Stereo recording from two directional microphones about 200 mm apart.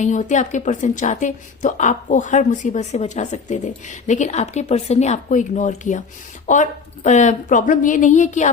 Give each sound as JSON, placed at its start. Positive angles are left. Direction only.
{"t": 0.0, "sound": "a woman's voice", "side_deg": 35}